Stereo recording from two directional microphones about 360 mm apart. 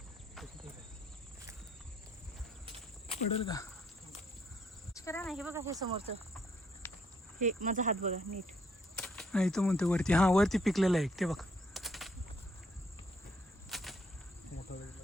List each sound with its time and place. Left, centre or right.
3.1 s speech: centre
4.9 s speech: centre
6.8 s cricket: centre
7.3 s speech: right
9.0 s speech: centre
13.7 s arrow: centre
14.7 s insect: left